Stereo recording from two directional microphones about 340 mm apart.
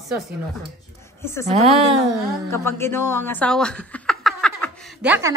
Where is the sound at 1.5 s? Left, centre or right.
Centre.